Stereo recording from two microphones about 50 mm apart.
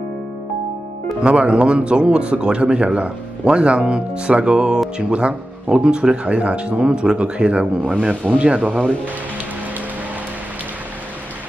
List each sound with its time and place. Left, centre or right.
1.2 s speech: right